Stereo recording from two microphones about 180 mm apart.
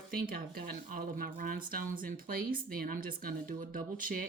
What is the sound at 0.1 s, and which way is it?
Speech, 55° right (ahead or behind).